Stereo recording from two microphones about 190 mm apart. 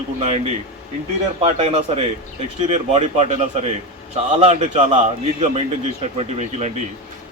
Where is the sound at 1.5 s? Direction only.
35° right (ahead or behind).